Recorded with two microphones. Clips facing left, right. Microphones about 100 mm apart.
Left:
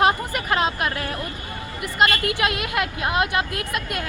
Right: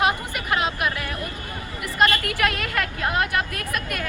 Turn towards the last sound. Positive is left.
turn(degrees=25)  # may be behind; listen again after turning